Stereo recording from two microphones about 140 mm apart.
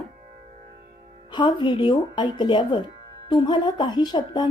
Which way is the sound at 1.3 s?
30° left (ahead or behind).